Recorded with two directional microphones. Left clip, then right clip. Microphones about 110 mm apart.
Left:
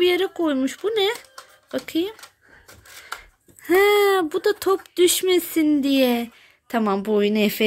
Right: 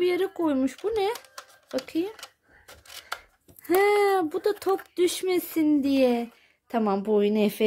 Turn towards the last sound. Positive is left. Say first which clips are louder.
# left 3 dB
turn(degrees=0)  # may be behind; listen again after turning